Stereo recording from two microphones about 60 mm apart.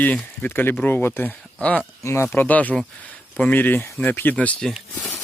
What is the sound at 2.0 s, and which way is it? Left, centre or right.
Speech, left.